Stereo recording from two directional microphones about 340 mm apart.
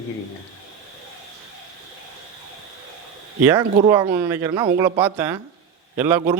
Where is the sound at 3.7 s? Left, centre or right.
Centre.